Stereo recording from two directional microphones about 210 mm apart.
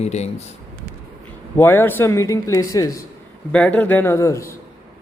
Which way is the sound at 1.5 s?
10° left (ahead or behind).